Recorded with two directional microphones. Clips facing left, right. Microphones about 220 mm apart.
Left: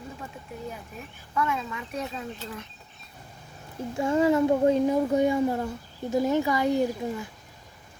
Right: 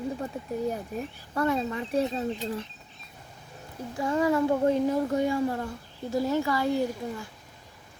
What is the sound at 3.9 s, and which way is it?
Speech, 25° left (ahead or behind).